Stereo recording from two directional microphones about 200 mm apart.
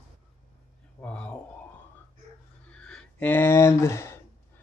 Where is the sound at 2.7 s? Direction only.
5° left (ahead or behind).